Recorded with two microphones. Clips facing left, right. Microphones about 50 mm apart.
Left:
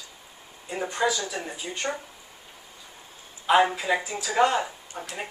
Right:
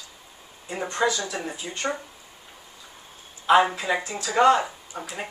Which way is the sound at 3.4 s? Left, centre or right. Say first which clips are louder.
Right 2 dB; centre.